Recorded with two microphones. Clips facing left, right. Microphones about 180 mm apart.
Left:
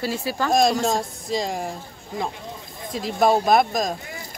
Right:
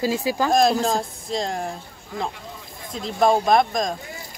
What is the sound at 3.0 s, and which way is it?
Speech, 5° left (ahead or behind).